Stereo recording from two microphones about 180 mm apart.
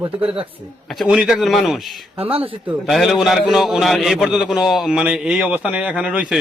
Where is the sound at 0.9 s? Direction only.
5° right (ahead or behind).